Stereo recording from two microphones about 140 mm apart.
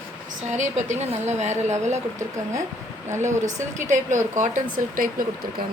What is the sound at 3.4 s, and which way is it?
Speech, 60° right (ahead or behind).